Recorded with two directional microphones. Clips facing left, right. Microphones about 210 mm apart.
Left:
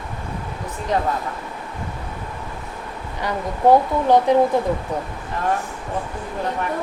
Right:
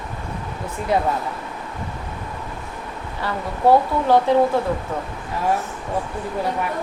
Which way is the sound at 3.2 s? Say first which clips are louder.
Left 1 dB; 15° left (ahead or behind).